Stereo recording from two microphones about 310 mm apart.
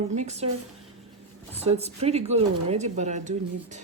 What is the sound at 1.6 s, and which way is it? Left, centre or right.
Speech, centre.